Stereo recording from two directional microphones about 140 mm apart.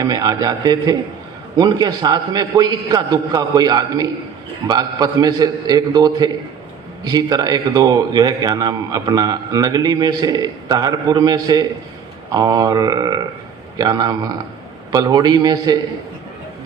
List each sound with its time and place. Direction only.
0.0 s a man's voice: 30° right (ahead or behind)